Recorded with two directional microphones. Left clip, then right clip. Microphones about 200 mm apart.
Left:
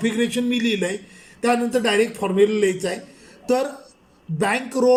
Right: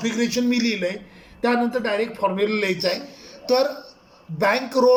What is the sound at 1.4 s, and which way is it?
Speech, 40° left (ahead or behind).